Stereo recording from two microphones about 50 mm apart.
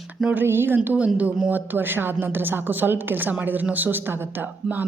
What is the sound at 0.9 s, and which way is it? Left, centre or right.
A woman's voice, right.